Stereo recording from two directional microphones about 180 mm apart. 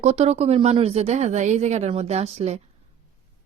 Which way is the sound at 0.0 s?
35° right (ahead or behind).